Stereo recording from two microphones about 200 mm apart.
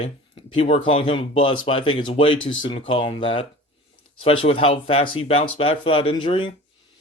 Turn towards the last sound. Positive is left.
turn(degrees=25)  # may be behind; listen again after turning